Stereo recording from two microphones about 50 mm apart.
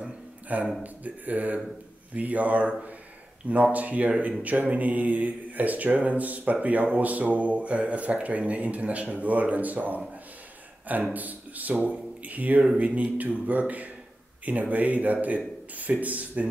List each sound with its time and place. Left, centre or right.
0.5 s speech: right
11.1 s a man's voice: right